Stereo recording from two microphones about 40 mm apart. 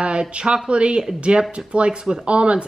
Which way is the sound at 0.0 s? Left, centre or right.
Right.